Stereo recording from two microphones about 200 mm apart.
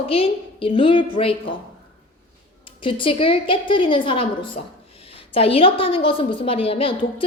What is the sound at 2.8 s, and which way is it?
A woman's voice, 25° left (ahead or behind).